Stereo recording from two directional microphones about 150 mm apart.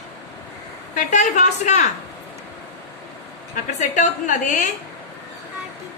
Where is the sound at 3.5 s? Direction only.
55° left (ahead or behind).